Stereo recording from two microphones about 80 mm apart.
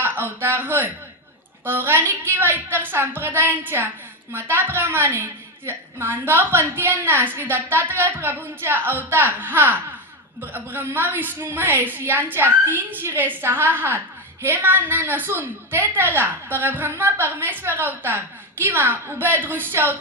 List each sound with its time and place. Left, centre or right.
0.0 s a woman's voice: right